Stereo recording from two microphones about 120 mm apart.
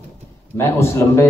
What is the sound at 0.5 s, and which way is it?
Speech, 20° left (ahead or behind).